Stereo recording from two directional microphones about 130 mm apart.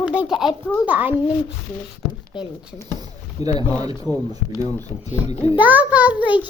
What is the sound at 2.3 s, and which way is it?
Speech, 40° left (ahead or behind).